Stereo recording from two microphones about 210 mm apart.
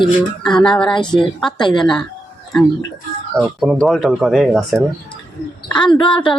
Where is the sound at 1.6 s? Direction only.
20° left (ahead or behind).